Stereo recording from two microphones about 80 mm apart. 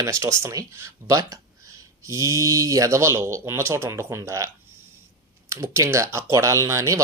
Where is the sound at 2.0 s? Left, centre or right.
Right.